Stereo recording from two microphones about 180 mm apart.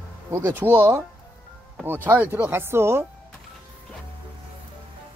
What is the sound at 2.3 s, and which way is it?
Speech, 10° right (ahead or behind).